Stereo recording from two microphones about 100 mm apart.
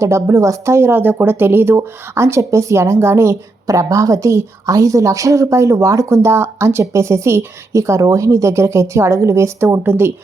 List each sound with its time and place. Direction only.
0.0 s speech: 30° right (ahead or behind)